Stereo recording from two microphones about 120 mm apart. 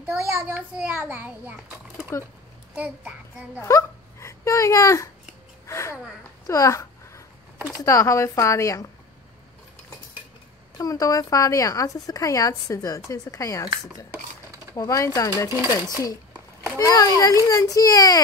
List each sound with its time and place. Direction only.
0.0 s a child's voice: 20° right (ahead or behind)
2.1 s speech: 25° left (ahead or behind)
2.7 s a child's voice: 10° right (ahead or behind)
3.5 s a child's voice: 25° left (ahead or behind)
6.4 s a sound: 25° left (ahead or behind)
7.8 s speech: 25° left (ahead or behind)
10.8 s speech: 30° left (ahead or behind)
14.8 s speech: 30° left (ahead or behind)